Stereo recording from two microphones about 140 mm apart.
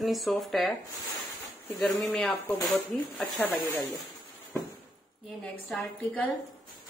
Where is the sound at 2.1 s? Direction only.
5° left (ahead or behind).